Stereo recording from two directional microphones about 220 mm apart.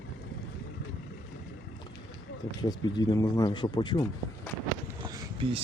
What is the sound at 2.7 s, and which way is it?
Speech, 15° left (ahead or behind).